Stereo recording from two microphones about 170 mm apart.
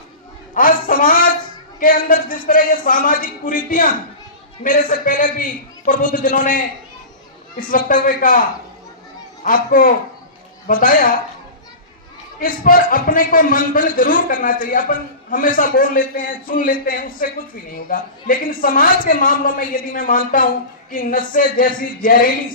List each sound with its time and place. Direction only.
0.5 s a sound: 55° left (ahead or behind)
1.8 s a woman's voice: 55° left (ahead or behind)
7.7 s a woman's voice: 55° left (ahead or behind)
12.4 s a man's voice: 55° left (ahead or behind)